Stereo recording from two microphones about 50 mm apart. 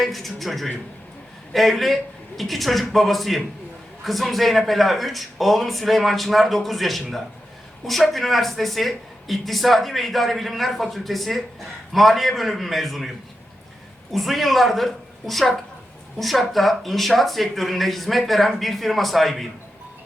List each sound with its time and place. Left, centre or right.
0.0 s speech: centre
14.1 s speech: centre